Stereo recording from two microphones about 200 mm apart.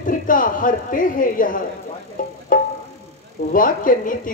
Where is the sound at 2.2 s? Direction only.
40° left (ahead or behind).